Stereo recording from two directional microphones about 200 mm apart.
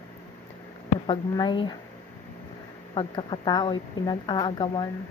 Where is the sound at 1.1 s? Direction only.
25° left (ahead or behind).